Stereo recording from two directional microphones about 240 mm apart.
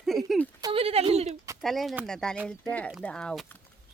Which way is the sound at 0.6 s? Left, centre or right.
Right.